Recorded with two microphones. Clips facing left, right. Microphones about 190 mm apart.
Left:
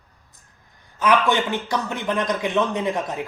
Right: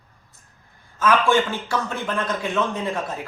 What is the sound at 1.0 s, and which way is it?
Speech, 15° left (ahead or behind).